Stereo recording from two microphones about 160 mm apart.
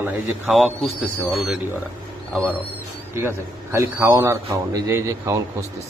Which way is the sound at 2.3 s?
15° right (ahead or behind).